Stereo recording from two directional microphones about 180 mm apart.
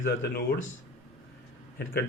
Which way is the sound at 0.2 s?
75° left (ahead or behind).